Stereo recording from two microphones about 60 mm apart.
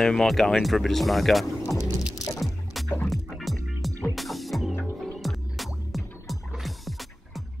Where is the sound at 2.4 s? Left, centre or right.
Centre.